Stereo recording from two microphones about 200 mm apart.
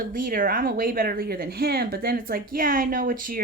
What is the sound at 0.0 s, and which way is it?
Speech, 45° right (ahead or behind).